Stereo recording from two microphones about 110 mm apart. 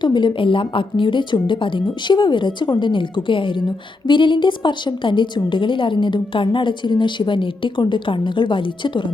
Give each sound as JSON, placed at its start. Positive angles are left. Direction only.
{"t": 0.0, "sound": "a woman's voice", "side_deg": 45}